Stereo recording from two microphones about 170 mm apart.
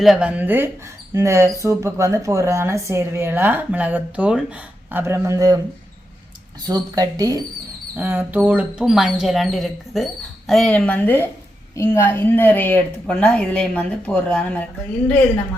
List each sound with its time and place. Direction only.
0.0 s speech: 5° right (ahead or behind); by 5.5 s 20° right (ahead or behind)
6.7 s speech: 25° right (ahead or behind)
7.9 s a woman's voice: 10° right (ahead or behind); by 15.1 s 10° left (ahead or behind)